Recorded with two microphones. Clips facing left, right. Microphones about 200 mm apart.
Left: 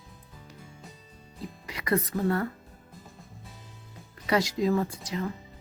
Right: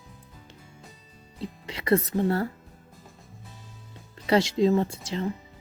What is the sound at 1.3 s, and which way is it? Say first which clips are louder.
Speech: right 4 dB; 25° right (ahead or behind).